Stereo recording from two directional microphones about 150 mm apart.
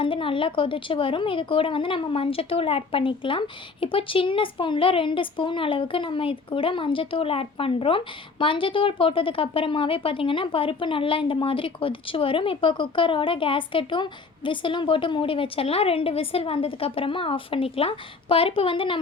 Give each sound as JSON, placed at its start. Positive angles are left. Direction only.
{"t": 0.0, "sound": "speech", "side_deg": 35}